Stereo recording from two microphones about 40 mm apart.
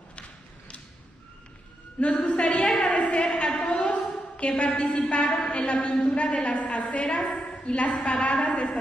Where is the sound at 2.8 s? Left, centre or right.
Left.